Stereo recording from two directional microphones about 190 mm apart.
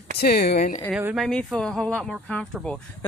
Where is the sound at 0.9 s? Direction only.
5° right (ahead or behind).